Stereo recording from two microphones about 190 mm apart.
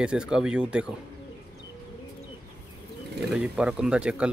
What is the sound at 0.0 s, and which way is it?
Speech, 5° right (ahead or behind).